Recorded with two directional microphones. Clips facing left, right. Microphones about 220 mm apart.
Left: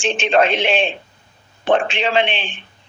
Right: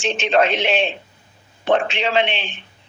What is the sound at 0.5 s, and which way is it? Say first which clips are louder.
Speech: left 2 dB; 30° left (ahead or behind).